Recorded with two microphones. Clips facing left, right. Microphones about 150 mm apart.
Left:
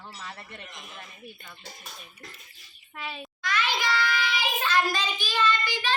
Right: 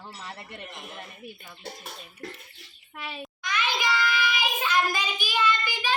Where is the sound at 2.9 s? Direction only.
Centre (ahead or behind).